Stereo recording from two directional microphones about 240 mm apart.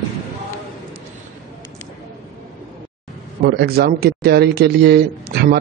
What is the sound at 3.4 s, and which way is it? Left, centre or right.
Speech, right.